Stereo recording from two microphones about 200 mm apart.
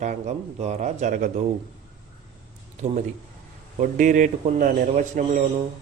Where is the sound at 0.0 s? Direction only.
35° right (ahead or behind).